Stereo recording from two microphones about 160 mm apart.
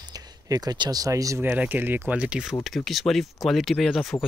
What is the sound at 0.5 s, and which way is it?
Speech, 25° right (ahead or behind).